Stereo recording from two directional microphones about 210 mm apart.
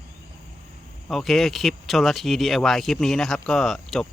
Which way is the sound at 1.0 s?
Centre (ahead or behind).